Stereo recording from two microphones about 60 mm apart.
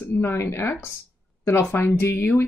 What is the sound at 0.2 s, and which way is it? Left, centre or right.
Speech, left.